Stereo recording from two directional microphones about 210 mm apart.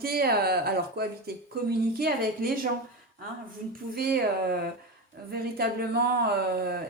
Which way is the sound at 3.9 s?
45° right (ahead or behind).